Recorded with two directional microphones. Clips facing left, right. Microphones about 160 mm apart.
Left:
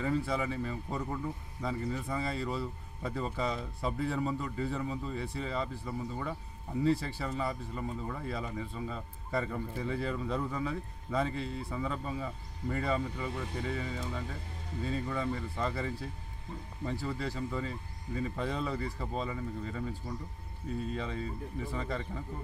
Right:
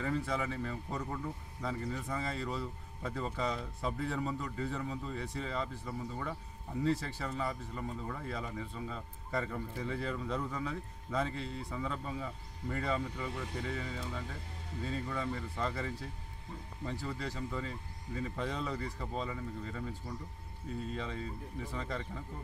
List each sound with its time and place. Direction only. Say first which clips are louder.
0.0 s speech: left 3 dB; 10° left (ahead or behind)
20.9 s speech: left 3 dB; 5° left (ahead or behind)